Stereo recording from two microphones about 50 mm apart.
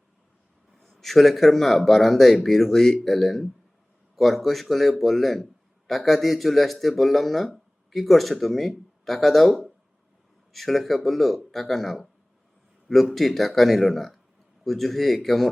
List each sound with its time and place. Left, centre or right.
0.8 s speech: centre